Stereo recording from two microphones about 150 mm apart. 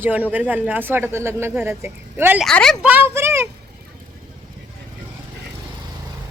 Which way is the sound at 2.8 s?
10° right (ahead or behind).